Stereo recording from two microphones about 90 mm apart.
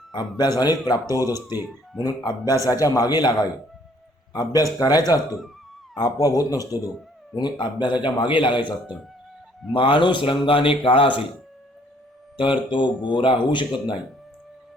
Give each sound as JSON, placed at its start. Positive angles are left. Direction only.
{"t": 0.3, "sound": "a man's voice", "side_deg": 50}
{"t": 1.2, "sound": "speech", "side_deg": -25}
{"t": 2.0, "sound": "a man's voice", "side_deg": 45}
{"t": 7.6, "sound": "a man's voice", "side_deg": 60}
{"t": 9.7, "sound": "speech", "side_deg": 75}
{"t": 12.4, "sound": "a man's voice", "side_deg": 65}